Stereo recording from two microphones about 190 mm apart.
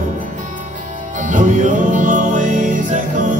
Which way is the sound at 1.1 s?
40° right (ahead or behind).